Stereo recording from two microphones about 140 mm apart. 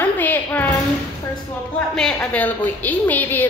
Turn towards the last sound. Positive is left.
turn(degrees=15)  # may be behind; listen again after turning